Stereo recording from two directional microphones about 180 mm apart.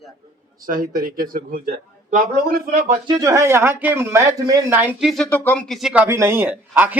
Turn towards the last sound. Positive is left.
turn(degrees=-10)  # may be behind; listen again after turning